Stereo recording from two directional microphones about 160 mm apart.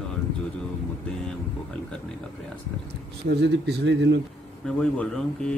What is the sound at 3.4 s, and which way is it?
Speech, 90° right.